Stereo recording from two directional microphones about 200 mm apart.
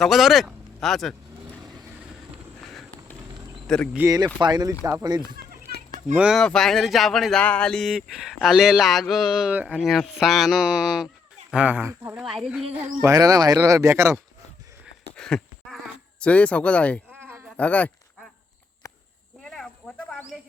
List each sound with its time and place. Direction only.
0.0 s speech: centre (ahead or behind)
3.9 s speech: 15° right (ahead or behind)
4.8 s speech: 10° right (ahead or behind)
6.1 s speech: 5° right (ahead or behind)
13.0 s speech: 15° right (ahead or behind)
15.1 s a sound: 5° left (ahead or behind)
16.2 s speech: 5° left (ahead or behind)
17.1 s a sound: 10° right (ahead or behind)
17.6 s a sound: 5° left (ahead or behind)
19.4 s snake: centre (ahead or behind)